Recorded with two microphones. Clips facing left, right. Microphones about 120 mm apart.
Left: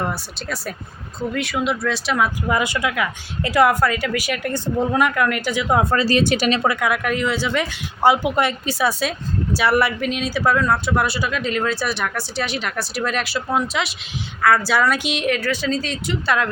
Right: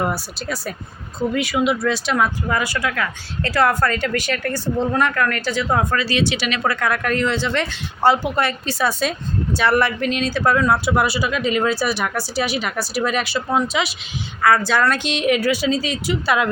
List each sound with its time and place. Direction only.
0.0 s speech: 5° right (ahead or behind)
2.5 s a woman's voice: 20° left (ahead or behind)
5.8 s speech: 30° left (ahead or behind)
6.7 s speech: 10° left (ahead or behind)
15.3 s a woman's voice: 10° right (ahead or behind)